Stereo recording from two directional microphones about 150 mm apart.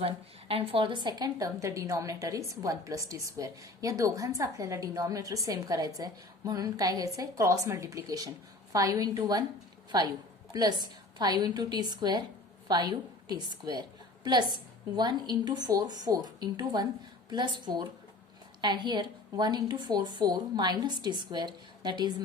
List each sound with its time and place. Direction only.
0.0 s a woman's voice: 40° right (ahead or behind)
10.5 s a woman's voice: 30° right (ahead or behind)
14.9 s a woman's voice: 30° right (ahead or behind)